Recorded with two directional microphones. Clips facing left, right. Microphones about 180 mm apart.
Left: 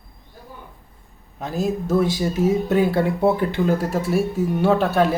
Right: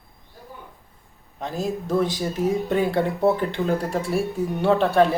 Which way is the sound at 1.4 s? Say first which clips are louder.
Left 3 dB; 5° left (ahead or behind).